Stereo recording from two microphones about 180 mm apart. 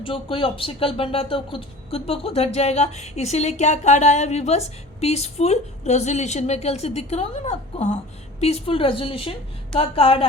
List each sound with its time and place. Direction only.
0.0 s speech: 30° left (ahead or behind)